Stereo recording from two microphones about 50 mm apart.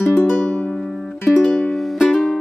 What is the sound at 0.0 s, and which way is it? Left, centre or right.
Music, left.